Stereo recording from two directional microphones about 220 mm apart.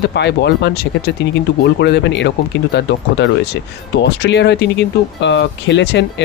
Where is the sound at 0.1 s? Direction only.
50° left (ahead or behind).